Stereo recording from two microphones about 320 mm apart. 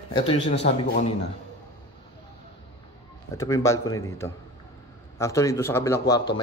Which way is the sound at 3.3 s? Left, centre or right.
Centre.